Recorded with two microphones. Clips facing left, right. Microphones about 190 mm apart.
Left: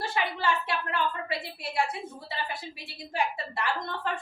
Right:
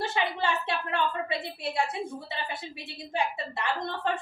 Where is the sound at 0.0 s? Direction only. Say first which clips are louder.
Right 1 dB; 25° right (ahead or behind).